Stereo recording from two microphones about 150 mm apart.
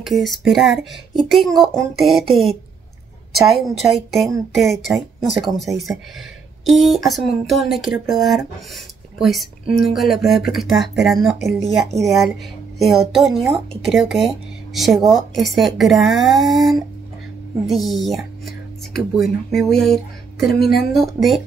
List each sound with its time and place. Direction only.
0.0 s speech: centre (ahead or behind)
19.5 s speech: centre (ahead or behind)
20.5 s a woman's voice: 90° left
20.9 s speech: centre (ahead or behind)